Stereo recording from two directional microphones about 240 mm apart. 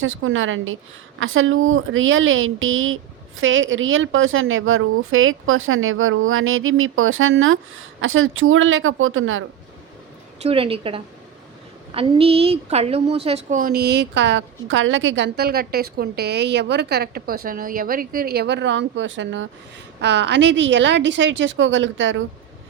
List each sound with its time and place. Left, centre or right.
0.0 s speech: right
10.4 s a woman's voice: right